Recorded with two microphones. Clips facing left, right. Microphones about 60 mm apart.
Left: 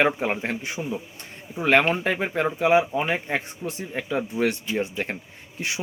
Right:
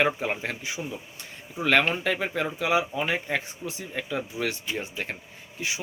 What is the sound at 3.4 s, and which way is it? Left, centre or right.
Speech, left.